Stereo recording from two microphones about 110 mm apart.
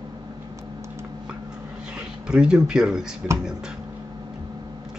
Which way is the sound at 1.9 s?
10° right (ahead or behind).